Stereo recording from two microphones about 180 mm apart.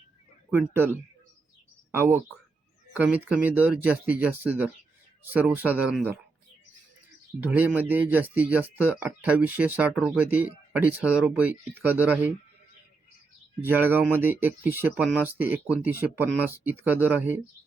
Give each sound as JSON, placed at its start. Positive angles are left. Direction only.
{"t": 1.9, "sound": "speech", "side_deg": -10}
{"t": 7.4, "sound": "speech", "side_deg": -10}
{"t": 13.6, "sound": "speech", "side_deg": -10}